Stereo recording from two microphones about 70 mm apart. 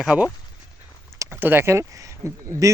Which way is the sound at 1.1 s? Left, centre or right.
Right.